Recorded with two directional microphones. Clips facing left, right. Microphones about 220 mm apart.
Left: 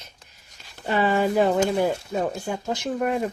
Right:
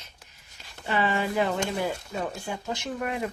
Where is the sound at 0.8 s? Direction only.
45° left (ahead or behind).